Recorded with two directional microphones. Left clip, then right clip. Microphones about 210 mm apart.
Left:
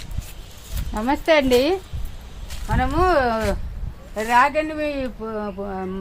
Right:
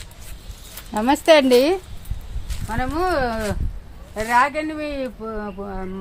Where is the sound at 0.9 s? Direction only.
50° right (ahead or behind).